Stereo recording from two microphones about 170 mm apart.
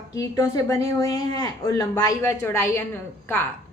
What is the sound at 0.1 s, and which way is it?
A woman's voice, 20° left (ahead or behind).